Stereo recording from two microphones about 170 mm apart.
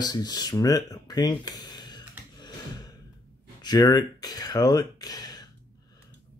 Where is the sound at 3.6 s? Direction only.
25° left (ahead or behind).